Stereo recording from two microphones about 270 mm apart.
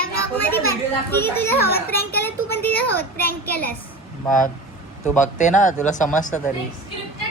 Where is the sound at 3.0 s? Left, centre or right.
Left.